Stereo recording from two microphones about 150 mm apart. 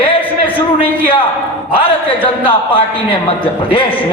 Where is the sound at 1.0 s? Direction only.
35° left (ahead or behind).